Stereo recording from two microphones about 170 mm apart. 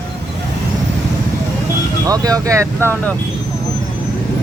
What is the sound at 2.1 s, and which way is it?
Speech, 20° right (ahead or behind).